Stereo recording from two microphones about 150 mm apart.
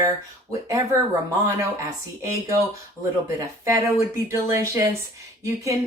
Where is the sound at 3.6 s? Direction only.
20° right (ahead or behind).